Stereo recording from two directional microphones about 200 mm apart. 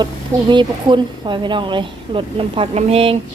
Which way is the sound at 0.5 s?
25° right (ahead or behind).